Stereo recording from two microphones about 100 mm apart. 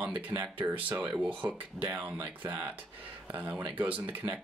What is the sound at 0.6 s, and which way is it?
Speech, 20° right (ahead or behind).